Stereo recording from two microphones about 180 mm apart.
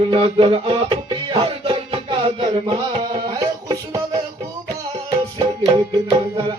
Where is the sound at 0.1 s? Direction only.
30° right (ahead or behind).